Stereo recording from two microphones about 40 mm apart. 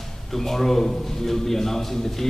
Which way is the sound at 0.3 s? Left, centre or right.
Centre.